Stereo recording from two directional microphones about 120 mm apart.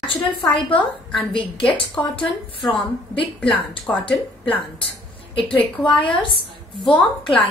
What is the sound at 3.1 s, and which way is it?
Speech, 45° left (ahead or behind).